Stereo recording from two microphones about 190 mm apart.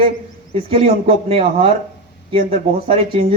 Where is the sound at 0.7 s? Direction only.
30° right (ahead or behind).